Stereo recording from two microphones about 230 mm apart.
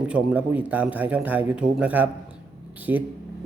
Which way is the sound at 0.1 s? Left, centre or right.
Centre.